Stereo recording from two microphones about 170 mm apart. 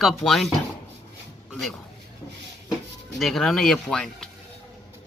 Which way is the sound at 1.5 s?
Centre (ahead or behind).